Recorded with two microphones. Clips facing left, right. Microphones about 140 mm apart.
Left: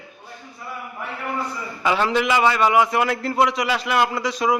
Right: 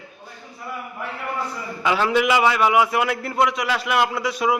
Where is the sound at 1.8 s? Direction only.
Centre (ahead or behind).